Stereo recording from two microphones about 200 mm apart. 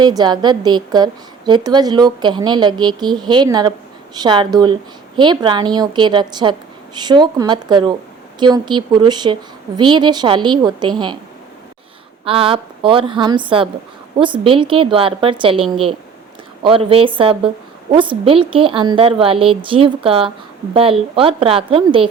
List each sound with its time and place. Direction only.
0.0 s a woman's voice: 20° right (ahead or behind)
12.2 s a woman's voice: 25° right (ahead or behind)
16.6 s a woman's voice: 25° right (ahead or behind)